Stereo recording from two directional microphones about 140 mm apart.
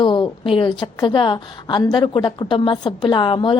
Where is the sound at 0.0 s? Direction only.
35° left (ahead or behind).